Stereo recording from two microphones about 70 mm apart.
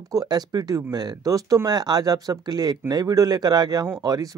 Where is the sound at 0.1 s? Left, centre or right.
Right.